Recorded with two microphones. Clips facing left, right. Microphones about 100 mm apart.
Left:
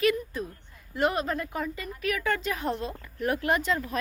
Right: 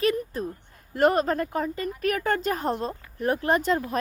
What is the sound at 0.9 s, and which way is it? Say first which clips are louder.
Speech: right 6 dB; 45° right (ahead or behind).